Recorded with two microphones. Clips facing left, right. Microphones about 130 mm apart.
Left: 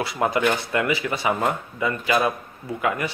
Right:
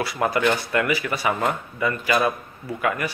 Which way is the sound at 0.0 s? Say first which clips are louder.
Even; 20° left (ahead or behind).